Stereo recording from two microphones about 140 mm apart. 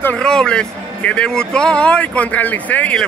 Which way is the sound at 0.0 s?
10° left (ahead or behind).